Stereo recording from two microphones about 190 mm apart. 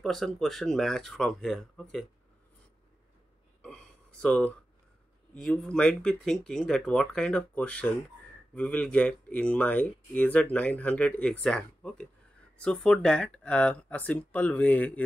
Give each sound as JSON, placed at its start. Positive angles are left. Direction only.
{"t": 0.0, "sound": "speech", "side_deg": 0}
{"t": 3.6, "sound": "a sound", "side_deg": 5}
{"t": 5.3, "sound": "speech", "side_deg": 5}